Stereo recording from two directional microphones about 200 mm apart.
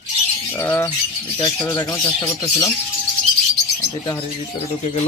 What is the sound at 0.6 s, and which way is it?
Speech, 10° left (ahead or behind).